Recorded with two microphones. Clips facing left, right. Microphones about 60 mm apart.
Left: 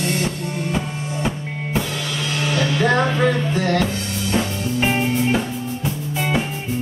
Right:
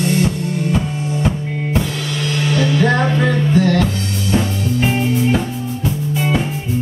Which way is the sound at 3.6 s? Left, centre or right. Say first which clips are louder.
Right 5 dB; left.